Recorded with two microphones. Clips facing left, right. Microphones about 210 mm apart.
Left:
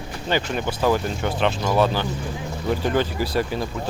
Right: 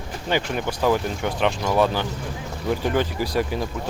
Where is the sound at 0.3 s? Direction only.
15° right (ahead or behind).